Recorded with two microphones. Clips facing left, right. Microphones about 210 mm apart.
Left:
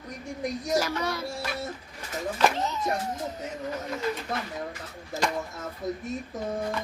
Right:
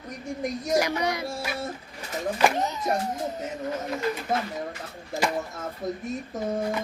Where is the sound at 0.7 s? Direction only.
15° right (ahead or behind).